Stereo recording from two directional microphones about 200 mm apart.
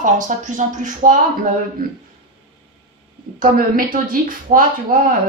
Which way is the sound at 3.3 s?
45° right (ahead or behind).